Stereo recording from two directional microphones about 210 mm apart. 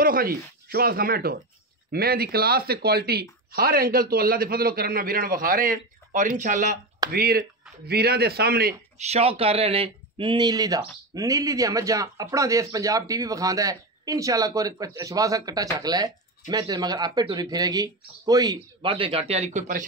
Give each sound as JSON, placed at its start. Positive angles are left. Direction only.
{"t": 0.0, "sound": "speech", "side_deg": -45}
{"t": 8.9, "sound": "speech", "side_deg": -30}